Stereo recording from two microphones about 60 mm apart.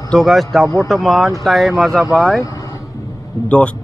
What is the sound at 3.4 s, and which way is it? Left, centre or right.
Speech, centre.